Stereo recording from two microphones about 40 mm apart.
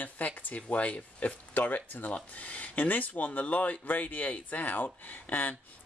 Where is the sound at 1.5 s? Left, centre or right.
Left.